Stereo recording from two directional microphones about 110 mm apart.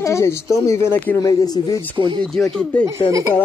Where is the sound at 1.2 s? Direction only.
35° left (ahead or behind).